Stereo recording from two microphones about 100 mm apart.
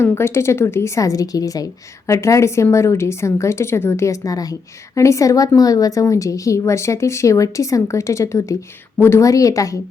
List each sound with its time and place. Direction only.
0.0 s a woman's voice: 25° left (ahead or behind)